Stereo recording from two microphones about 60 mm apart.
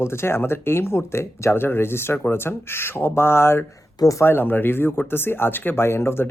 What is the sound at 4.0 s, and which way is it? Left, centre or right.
Speech, left.